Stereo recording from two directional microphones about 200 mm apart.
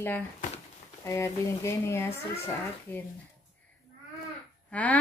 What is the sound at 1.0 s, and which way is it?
Speech, 15° left (ahead or behind).